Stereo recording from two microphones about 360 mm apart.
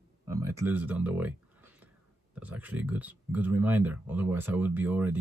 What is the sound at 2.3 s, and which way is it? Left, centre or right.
Speech, centre.